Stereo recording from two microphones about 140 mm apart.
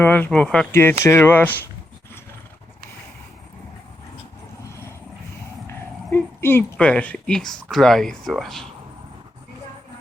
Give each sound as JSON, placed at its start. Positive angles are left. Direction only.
{"t": 0.0, "sound": "speech", "side_deg": 15}
{"t": 0.7, "sound": "speech", "side_deg": 15}
{"t": 5.6, "sound": "speech", "side_deg": 20}